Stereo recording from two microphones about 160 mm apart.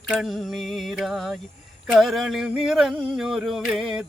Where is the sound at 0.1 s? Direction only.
Centre (ahead or behind).